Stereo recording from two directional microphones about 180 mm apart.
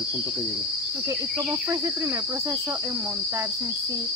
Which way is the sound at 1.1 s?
20° right (ahead or behind).